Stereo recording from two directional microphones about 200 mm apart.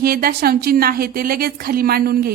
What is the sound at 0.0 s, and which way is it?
A woman's voice, 50° right (ahead or behind).